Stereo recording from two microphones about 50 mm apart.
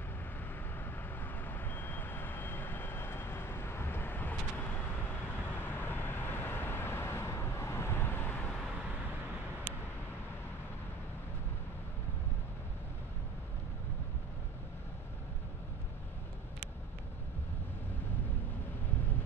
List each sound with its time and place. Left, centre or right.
0.7 s vehicle: left